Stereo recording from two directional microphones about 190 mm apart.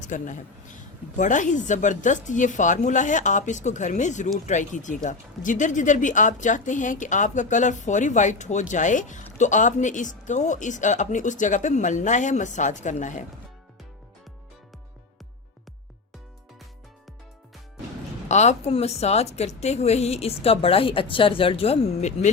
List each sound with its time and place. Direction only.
0.0 s speech: 40° left (ahead or behind)
18.3 s speech: 35° left (ahead or behind)